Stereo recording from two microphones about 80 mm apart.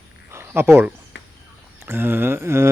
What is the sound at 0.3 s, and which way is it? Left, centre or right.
Cricket, right.